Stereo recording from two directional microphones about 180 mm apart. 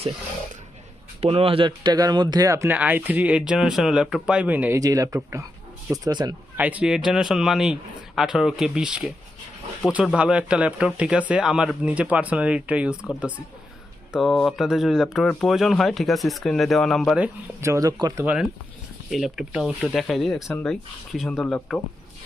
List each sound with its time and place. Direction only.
1.2 s speech: 30° right (ahead or behind)
6.6 s speech: 10° right (ahead or behind)
19.1 s speech: centre (ahead or behind)